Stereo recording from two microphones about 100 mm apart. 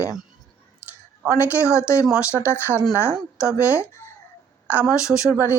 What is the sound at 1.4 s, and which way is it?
Speech, 25° left (ahead or behind).